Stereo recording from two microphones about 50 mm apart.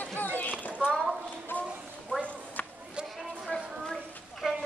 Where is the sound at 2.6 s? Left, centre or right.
Left.